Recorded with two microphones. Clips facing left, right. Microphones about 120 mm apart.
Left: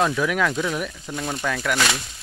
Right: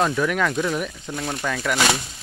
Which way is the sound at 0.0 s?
Centre (ahead or behind).